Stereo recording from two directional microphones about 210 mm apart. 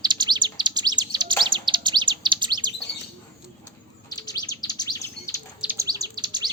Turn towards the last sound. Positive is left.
turn(degrees=-20)  # may be behind; listen again after turning